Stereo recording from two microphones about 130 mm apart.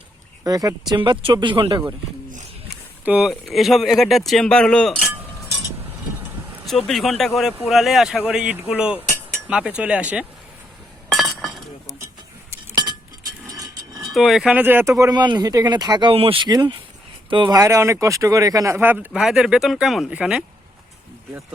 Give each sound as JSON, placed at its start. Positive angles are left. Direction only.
{"t": 0.4, "sound": "speech", "side_deg": -30}
{"t": 3.0, "sound": "speech", "side_deg": -5}
{"t": 6.8, "sound": "speech", "side_deg": 0}
{"t": 11.1, "sound": "chink", "side_deg": 0}
{"t": 12.7, "sound": "chink", "side_deg": -35}
{"t": 13.5, "sound": "a sound", "side_deg": -25}
{"t": 14.1, "sound": "speech", "side_deg": 0}
{"t": 16.5, "sound": "speech", "side_deg": -30}
{"t": 17.6, "sound": "speech", "side_deg": -20}